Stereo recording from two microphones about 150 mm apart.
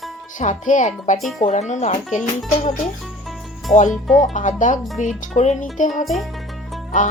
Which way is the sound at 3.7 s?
50° left (ahead or behind).